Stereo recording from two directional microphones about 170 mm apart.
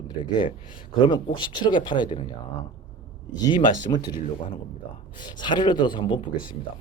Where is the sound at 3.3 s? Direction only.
25° left (ahead or behind).